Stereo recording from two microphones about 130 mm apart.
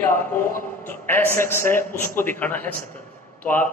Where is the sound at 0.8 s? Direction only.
15° left (ahead or behind).